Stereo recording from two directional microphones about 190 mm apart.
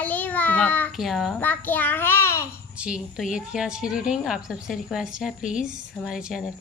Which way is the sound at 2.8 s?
5° right (ahead or behind).